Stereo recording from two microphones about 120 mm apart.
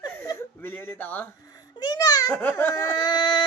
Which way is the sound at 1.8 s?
35° left (ahead or behind).